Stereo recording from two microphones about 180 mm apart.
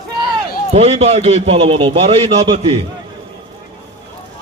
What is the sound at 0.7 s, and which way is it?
A man's voice, 35° right (ahead or behind).